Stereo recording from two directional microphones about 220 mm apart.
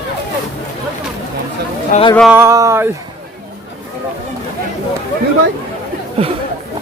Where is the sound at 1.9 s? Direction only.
25° left (ahead or behind).